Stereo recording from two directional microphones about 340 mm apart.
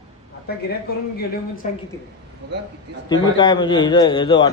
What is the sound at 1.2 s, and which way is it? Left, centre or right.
Speech, left.